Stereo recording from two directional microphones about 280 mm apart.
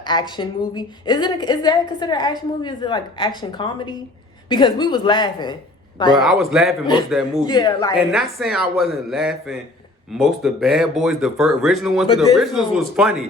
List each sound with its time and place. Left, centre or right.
0.0 s a woman's voice: centre
6.1 s speech: centre
7.4 s a woman's voice: centre
7.9 s speech: centre